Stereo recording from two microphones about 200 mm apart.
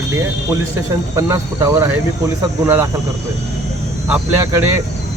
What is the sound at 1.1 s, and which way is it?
Speech, 15° right (ahead or behind).